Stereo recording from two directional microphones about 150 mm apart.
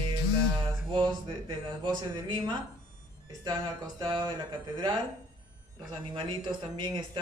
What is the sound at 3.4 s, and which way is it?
Speech, 25° right (ahead or behind).